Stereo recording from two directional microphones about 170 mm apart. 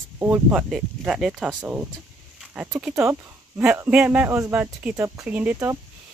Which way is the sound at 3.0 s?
15° right (ahead or behind).